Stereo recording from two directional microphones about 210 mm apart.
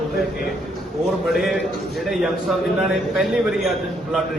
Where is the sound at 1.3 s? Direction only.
Centre (ahead or behind).